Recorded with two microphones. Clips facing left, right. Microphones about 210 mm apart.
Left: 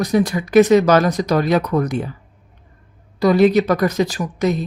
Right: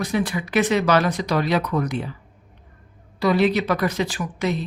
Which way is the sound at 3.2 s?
40° left (ahead or behind).